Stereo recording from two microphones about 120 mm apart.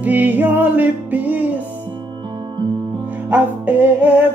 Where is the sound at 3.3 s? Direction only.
15° right (ahead or behind).